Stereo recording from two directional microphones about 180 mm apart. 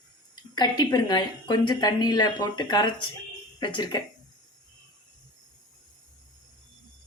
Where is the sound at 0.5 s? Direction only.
25° left (ahead or behind).